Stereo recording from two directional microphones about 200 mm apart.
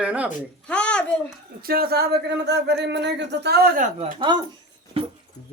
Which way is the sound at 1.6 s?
50° right (ahead or behind).